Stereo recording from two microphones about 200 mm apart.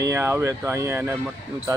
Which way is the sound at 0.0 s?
10° right (ahead or behind).